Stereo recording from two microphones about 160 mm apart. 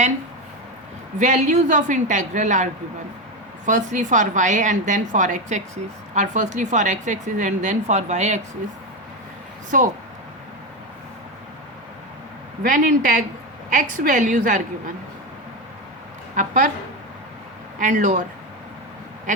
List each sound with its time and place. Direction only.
1.2 s a woman's voice: 50° right (ahead or behind)
3.7 s a woman's voice: 50° right (ahead or behind)
9.7 s a woman's voice: 55° right (ahead or behind)
12.6 s a woman's voice: 60° right (ahead or behind)
16.3 s a woman's voice: 55° right (ahead or behind)
17.7 s a woman's voice: 50° right (ahead or behind)